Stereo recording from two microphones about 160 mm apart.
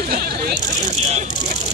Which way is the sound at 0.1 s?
75° right (ahead or behind).